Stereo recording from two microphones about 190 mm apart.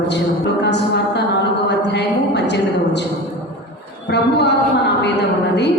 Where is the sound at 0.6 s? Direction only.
65° left (ahead or behind).